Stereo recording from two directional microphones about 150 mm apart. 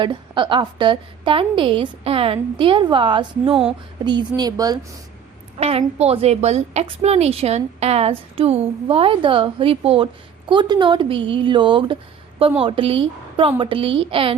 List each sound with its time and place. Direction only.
0.0 s a woman's voice: 30° right (ahead or behind)
5.5 s a woman's voice: 45° right (ahead or behind)